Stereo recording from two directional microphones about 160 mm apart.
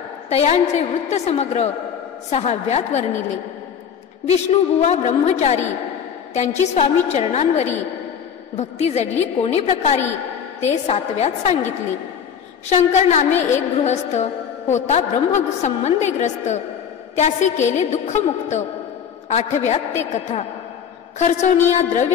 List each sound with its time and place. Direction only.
0.3 s a woman's voice: 40° left (ahead or behind)
4.3 s a woman's voice: 40° left (ahead or behind)
12.6 s a woman's voice: 45° left (ahead or behind)
21.2 s a woman's voice: 45° left (ahead or behind)